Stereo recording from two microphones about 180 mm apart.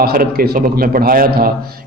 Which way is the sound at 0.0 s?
55° right (ahead or behind).